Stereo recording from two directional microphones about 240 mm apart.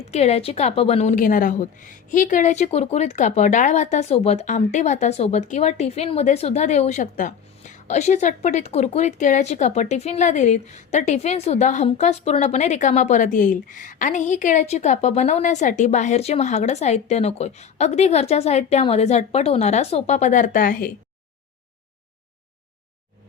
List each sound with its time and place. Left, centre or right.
0.1 s a woman's voice: left